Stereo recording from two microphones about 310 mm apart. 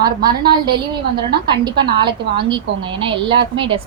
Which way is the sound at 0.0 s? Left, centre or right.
Centre.